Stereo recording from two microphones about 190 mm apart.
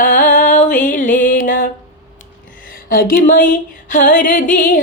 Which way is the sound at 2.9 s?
50° left (ahead or behind).